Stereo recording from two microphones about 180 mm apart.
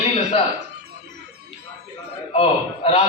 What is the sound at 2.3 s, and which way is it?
Speech, 35° left (ahead or behind).